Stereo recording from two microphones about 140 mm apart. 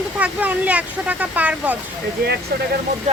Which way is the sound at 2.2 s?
90° right.